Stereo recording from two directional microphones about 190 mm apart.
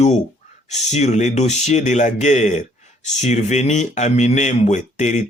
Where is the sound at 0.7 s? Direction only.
40° left (ahead or behind).